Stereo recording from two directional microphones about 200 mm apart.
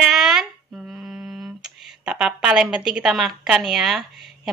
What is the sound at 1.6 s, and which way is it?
A woman's voice, 5° right (ahead or behind).